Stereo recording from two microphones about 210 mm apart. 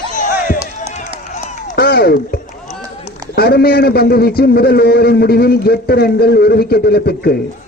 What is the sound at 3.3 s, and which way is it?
A man's voice, 50° left (ahead or behind).